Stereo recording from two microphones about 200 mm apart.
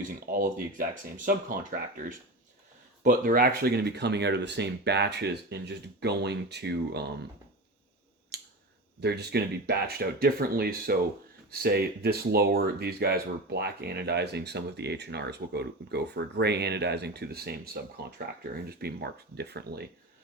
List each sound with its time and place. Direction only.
0.3 s speech: 45° right (ahead or behind)
8.3 s scissors: 55° right (ahead or behind)
9.0 s speech: 55° right (ahead or behind)